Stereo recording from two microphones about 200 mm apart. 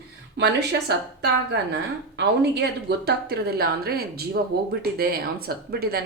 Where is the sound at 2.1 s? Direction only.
55° right (ahead or behind).